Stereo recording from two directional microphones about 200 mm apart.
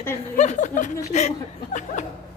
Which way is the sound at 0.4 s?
35° left (ahead or behind).